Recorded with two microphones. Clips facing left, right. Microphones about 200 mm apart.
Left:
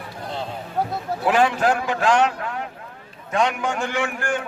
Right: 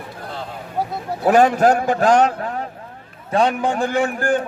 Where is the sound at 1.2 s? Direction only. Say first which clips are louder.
Right 6 dB; 40° right (ahead or behind).